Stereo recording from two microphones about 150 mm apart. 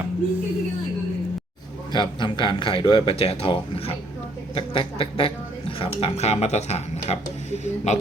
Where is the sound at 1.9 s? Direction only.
30° left (ahead or behind).